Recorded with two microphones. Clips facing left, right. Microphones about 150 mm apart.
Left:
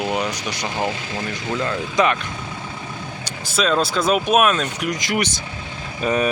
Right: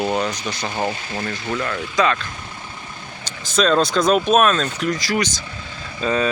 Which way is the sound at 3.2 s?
5° left (ahead or behind).